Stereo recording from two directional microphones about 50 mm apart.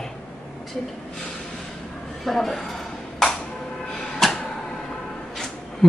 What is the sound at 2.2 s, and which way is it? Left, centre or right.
Speech, centre.